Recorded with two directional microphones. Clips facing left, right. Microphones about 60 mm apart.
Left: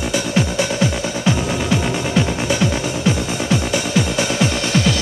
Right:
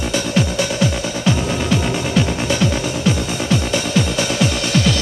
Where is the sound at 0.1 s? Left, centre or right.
Centre.